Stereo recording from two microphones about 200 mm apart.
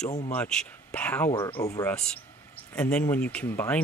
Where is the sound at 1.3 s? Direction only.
25° left (ahead or behind).